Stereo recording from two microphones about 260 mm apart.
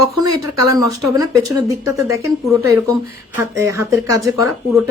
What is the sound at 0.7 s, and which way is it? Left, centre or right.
A woman's voice, centre.